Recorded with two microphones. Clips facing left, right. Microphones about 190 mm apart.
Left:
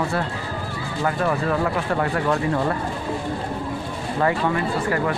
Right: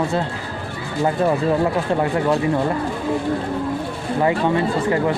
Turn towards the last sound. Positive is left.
turn(degrees=-20)  # may be behind; listen again after turning